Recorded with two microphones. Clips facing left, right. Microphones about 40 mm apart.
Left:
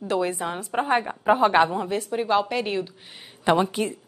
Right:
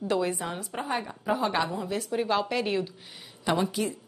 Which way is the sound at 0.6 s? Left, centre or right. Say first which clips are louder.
Left 8 dB; left.